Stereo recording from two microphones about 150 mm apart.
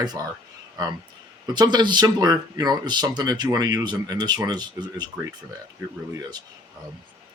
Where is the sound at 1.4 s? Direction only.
30° right (ahead or behind).